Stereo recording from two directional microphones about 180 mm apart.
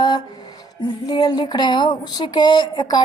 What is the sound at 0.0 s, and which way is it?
Speech, 25° left (ahead or behind).